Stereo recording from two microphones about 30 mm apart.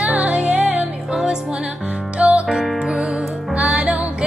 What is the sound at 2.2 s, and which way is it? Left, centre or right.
Music, right.